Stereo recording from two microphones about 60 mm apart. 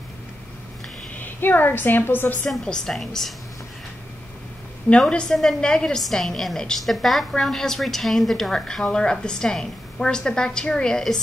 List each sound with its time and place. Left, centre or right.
1.1 s a woman's voice: left
2.6 s a woman's voice: centre
5.0 s a woman's voice: centre